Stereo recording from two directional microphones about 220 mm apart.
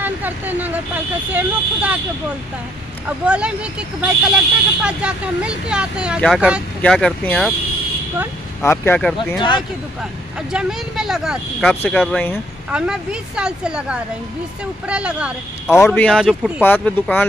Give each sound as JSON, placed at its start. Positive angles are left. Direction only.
{"t": 0.0, "sound": "speech", "side_deg": -10}
{"t": 3.1, "sound": "speech", "side_deg": -5}
{"t": 8.6, "sound": "speech", "side_deg": 10}
{"t": 10.5, "sound": "speech", "side_deg": -5}
{"t": 12.7, "sound": "speech", "side_deg": -5}
{"t": 15.8, "sound": "speech", "side_deg": 5}
{"t": 16.6, "sound": "speech", "side_deg": 10}